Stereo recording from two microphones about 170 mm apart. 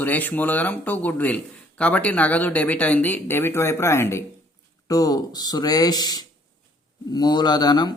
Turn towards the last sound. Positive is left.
turn(degrees=25)  # may be behind; listen again after turning